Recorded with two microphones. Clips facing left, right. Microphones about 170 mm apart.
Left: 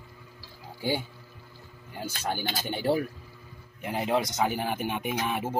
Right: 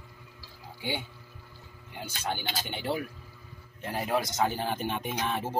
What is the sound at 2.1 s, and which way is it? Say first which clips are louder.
Speech: left 2 dB; 45° left (ahead or behind).